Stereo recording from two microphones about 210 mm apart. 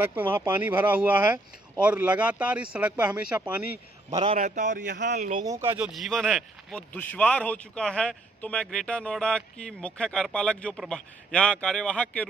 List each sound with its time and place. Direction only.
0.0 s speech: 10° right (ahead or behind)
4.3 s a man's voice: 35° right (ahead or behind)
4.9 s speech: 50° right (ahead or behind)
5.4 s speech: 15° right (ahead or behind)
5.9 s speech: centre (ahead or behind)